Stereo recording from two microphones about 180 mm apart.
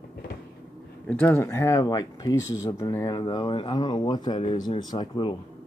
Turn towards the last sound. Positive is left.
turn(degrees=25)  # may be behind; listen again after turning